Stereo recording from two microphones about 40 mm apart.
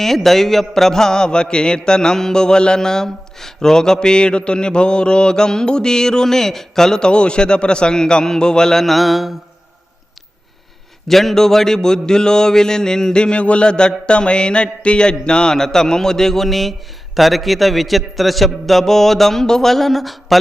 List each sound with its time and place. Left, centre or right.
0.0 s mantra: centre
11.1 s a sound: centre; by 15.5 s left
15.5 s mantra: centre
17.2 s a man's voice: centre